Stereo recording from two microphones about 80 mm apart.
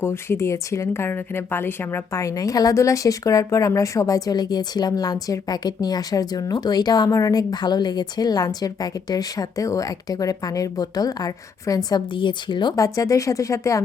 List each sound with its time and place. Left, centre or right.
0.0 s a woman's voice: left
2.2 s a woman's voice: left
7.1 s a woman's voice: left
12.7 s a woman's voice: left